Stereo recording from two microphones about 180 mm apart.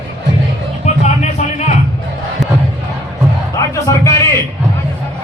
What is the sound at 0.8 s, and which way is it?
Music, 40° left (ahead or behind).